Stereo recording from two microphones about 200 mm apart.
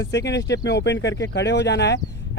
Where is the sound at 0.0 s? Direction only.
60° left (ahead or behind).